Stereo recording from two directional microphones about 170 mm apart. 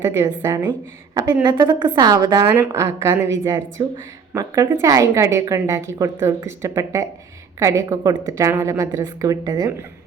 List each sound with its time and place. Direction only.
0.0 s a woman's voice: 15° right (ahead or behind)